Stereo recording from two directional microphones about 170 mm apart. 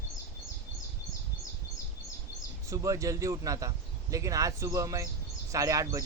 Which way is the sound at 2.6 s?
20° right (ahead or behind).